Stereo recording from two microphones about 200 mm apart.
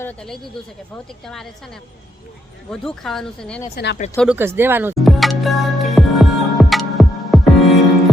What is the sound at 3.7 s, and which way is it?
Speech, 60° left (ahead or behind).